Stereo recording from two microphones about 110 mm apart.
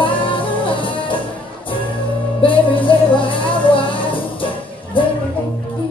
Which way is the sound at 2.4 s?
50° left (ahead or behind).